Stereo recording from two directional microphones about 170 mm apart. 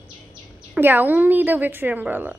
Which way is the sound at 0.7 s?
10° right (ahead or behind).